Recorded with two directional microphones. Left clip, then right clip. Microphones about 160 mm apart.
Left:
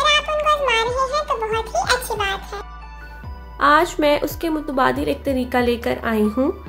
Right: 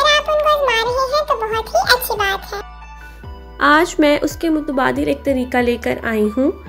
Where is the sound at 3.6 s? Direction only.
35° right (ahead or behind).